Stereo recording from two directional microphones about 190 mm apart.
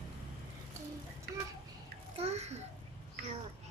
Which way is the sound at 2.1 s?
35° right (ahead or behind).